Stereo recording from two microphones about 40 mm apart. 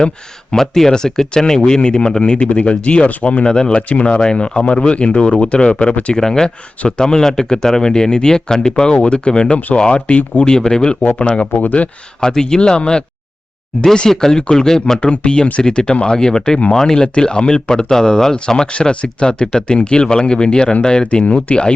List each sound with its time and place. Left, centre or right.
0.5 s speech: centre; by 4.2 s left
4.2 s speech: left
6.1 s speech: centre; by 10.5 s left
10.5 s speech: centre
11.2 s speech: left
12.2 s speech: centre
14.1 s speech: centre
15.0 s speech: left